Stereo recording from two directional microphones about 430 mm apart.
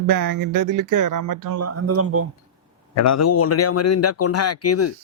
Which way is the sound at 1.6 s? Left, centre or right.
Right.